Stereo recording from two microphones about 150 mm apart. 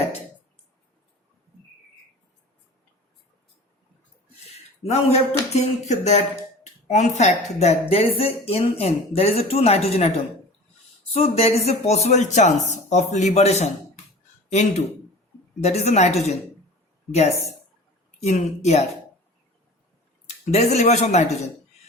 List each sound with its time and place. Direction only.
4.4 s speech: 45° left (ahead or behind)
11.1 s speech: 45° left (ahead or behind)
18.2 s speech: 50° left (ahead or behind)
20.2 s speech: 45° left (ahead or behind)